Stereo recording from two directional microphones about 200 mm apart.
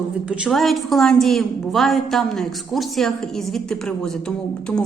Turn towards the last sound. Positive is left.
turn(degrees=5)  # may be behind; listen again after turning